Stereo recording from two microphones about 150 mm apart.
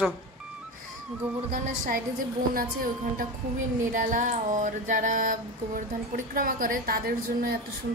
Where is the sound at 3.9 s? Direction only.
60° right (ahead or behind).